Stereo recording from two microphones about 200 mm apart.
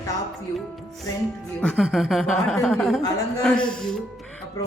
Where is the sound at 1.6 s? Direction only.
5° left (ahead or behind).